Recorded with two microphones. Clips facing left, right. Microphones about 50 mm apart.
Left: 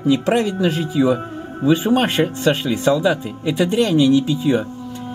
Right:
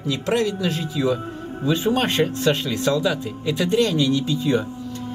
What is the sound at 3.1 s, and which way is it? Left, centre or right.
Speech, left.